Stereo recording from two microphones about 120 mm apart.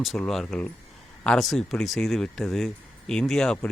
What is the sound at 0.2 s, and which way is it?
Speech, 5° left (ahead or behind).